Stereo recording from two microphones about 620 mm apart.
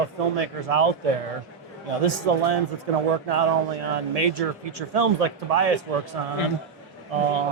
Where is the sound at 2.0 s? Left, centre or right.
Right.